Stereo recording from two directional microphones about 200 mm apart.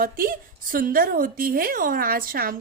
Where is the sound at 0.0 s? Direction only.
45° right (ahead or behind).